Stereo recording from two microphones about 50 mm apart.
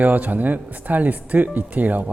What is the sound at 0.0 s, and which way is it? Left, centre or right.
Speech, right.